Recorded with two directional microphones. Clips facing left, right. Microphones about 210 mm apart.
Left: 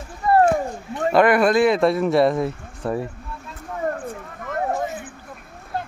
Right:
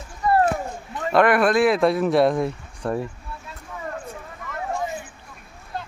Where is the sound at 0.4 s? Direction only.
45° left (ahead or behind).